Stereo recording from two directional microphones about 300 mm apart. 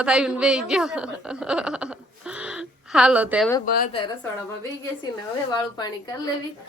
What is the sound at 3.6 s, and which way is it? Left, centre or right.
Speech, left.